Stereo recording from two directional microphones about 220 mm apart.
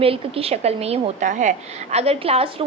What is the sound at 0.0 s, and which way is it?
A woman's voice, 25° right (ahead or behind).